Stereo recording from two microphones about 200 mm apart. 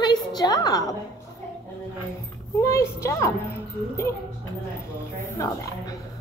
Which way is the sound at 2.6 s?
15° left (ahead or behind).